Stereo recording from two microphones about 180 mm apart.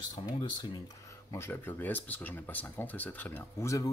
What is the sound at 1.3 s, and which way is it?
Speech, 15° left (ahead or behind).